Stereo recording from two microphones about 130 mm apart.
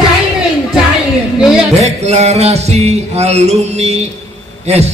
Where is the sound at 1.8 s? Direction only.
55° right (ahead or behind).